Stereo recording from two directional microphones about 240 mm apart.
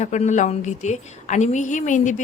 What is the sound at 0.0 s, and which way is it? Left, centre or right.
A woman's voice, left.